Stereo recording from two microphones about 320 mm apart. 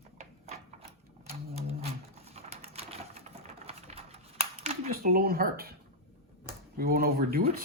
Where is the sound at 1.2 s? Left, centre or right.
Centre.